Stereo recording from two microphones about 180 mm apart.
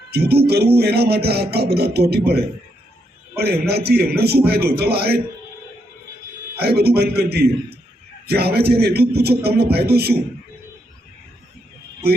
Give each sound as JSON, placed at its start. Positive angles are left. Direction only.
{"t": 0.1, "sound": "a man's voice", "side_deg": -60}
{"t": 6.6, "sound": "a man's voice", "side_deg": -60}